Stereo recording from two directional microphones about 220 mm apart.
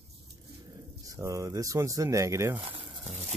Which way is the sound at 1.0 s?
15° right (ahead or behind).